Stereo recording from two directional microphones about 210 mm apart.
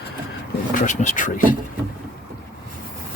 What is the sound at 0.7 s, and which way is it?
Speech, 35° left (ahead or behind).